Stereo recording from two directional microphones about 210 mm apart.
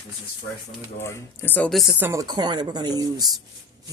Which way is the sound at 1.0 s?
10° left (ahead or behind).